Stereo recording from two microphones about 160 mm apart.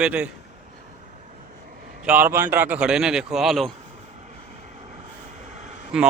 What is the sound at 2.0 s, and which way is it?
A man's voice, 10° right (ahead or behind).